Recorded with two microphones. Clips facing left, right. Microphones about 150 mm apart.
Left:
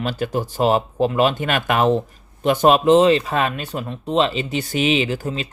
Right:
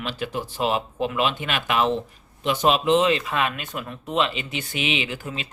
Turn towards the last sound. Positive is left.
turn(degrees=35)  # may be behind; listen again after turning